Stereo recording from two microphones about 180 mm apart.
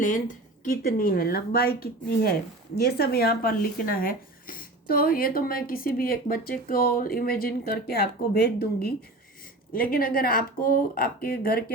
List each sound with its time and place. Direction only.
0.6 s speech: 50° left (ahead or behind)